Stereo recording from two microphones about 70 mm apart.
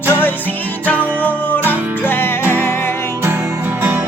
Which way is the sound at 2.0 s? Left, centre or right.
Left.